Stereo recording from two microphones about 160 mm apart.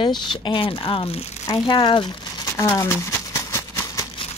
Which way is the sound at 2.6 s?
15° left (ahead or behind).